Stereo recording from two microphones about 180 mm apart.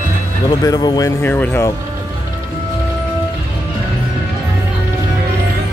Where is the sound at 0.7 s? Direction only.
20° left (ahead or behind).